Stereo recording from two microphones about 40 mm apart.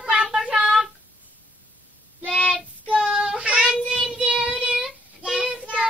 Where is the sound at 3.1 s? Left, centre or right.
Right.